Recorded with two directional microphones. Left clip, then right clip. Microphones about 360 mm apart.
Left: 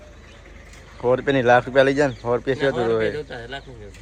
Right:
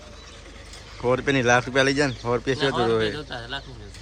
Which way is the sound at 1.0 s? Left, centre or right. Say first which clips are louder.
Left 3 dB; centre.